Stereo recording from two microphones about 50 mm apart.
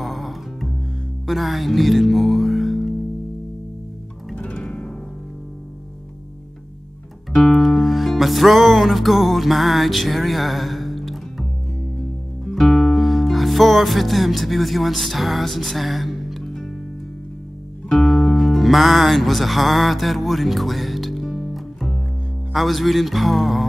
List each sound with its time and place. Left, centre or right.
0.0 s music: centre
4.4 s music: left
7.3 s music: centre
12.5 s music: centre
17.8 s speech: centre
21.5 s music: centre
22.5 s speech: centre